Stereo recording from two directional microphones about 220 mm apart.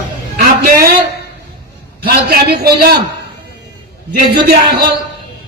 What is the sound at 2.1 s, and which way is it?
Speech, 45° right (ahead or behind).